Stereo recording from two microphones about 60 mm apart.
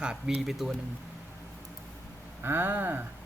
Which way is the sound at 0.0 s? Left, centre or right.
Centre.